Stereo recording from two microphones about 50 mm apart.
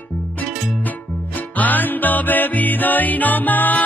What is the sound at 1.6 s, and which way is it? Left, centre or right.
Music, left.